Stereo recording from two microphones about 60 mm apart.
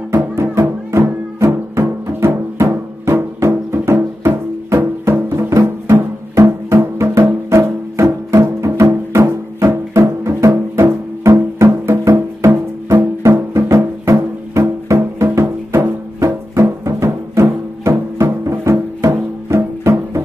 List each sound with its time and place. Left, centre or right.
0.1 s music: right
6.3 s music: right
16.2 s music: right